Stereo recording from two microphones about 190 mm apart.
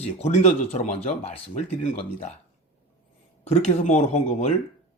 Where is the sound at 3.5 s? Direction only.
35° left (ahead or behind).